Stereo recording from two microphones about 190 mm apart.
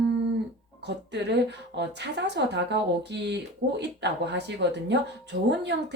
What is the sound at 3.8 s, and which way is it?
A woman's voice, 65° right (ahead or behind).